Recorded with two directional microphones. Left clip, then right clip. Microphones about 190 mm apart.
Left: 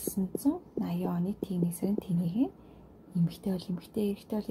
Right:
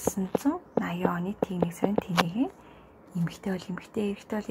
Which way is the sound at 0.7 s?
15° left (ahead or behind).